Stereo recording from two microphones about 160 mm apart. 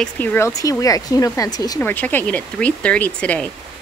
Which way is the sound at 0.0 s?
10° left (ahead or behind).